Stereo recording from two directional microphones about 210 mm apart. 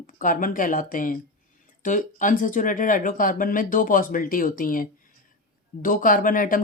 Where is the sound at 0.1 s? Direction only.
40° left (ahead or behind).